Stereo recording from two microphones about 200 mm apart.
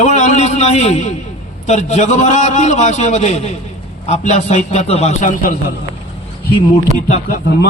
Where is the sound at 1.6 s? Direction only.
35° left (ahead or behind).